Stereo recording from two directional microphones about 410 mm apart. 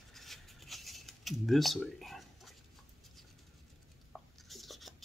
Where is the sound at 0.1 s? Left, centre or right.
Centre.